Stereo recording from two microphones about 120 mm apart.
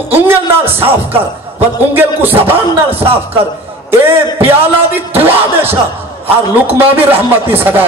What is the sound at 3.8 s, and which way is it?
A man's voice, 20° right (ahead or behind).